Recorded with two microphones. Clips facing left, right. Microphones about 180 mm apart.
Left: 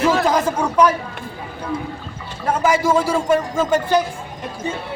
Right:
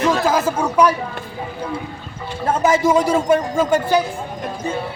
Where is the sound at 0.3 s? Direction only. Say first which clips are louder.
Even; 5° right (ahead or behind).